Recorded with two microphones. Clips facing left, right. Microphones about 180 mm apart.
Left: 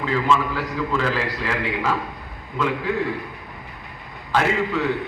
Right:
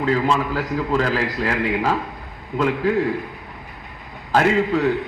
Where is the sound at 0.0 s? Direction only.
40° right (ahead or behind).